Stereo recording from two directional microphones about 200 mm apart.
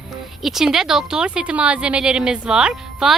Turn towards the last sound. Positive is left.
turn(degrees=-5)  # may be behind; listen again after turning